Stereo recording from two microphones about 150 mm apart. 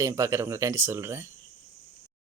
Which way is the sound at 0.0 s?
20° right (ahead or behind).